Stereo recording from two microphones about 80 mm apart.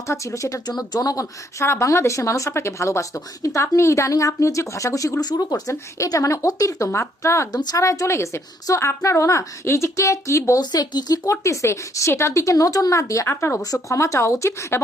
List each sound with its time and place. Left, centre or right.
0.1 s speech: left
5.2 s speech: left
7.5 s speech: left
10.6 s speech: left
11.3 s speech: left